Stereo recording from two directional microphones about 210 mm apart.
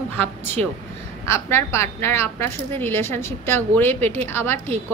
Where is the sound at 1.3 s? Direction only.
10° left (ahead or behind).